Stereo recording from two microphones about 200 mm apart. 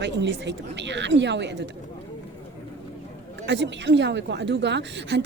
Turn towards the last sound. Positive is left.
turn(degrees=-60)  # may be behind; listen again after turning